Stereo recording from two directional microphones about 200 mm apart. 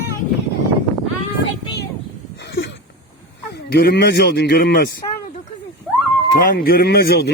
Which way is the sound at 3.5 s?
55° left (ahead or behind).